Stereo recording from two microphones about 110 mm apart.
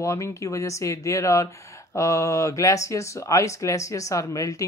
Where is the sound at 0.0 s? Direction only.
25° left (ahead or behind).